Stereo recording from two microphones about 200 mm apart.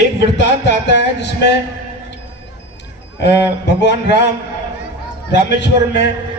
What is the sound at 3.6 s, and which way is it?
Speech, 60° left (ahead or behind).